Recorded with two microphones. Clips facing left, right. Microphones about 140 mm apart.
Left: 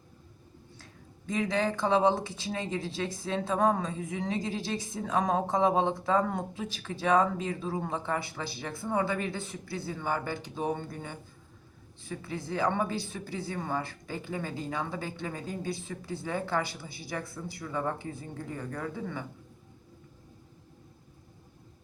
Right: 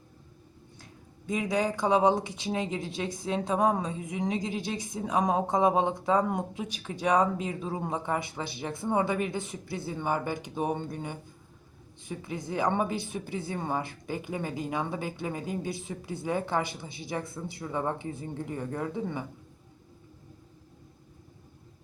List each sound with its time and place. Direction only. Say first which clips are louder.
1.3 s a woman's voice: right 1 dB; 10° right (ahead or behind)